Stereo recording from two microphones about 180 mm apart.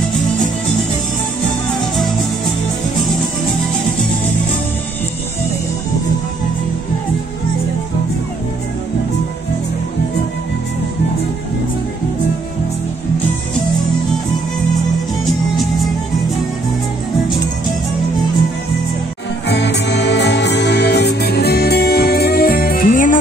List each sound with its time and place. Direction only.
19.4 s music: 70° left (ahead or behind); by 23.1 s 50° left (ahead or behind)